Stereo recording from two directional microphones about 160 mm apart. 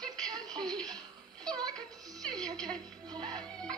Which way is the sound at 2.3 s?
25° right (ahead or behind).